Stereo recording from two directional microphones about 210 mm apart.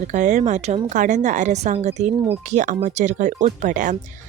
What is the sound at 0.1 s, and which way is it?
Speech, 35° right (ahead or behind).